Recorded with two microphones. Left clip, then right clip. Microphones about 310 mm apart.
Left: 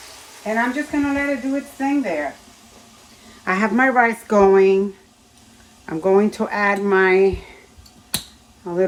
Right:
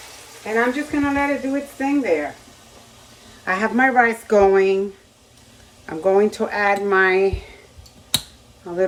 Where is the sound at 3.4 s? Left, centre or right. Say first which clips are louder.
Even; left.